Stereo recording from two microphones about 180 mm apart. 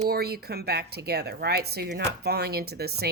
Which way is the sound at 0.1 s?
60° right (ahead or behind).